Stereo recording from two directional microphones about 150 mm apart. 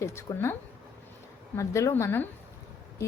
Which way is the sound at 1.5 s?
20° left (ahead or behind).